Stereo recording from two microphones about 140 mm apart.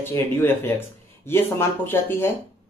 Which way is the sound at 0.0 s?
15° left (ahead or behind).